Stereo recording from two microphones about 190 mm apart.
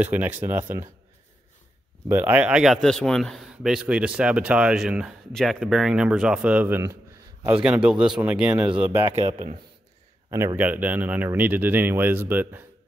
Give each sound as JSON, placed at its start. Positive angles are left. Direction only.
{"t": 0.0, "sound": "speech", "side_deg": -10}
{"t": 2.0, "sound": "a man's voice", "side_deg": -10}
{"t": 9.0, "sound": "speech", "side_deg": -35}
{"t": 10.3, "sound": "speech", "side_deg": -15}